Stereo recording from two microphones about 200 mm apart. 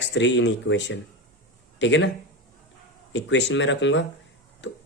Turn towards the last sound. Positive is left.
turn(degrees=65)  # may be behind; listen again after turning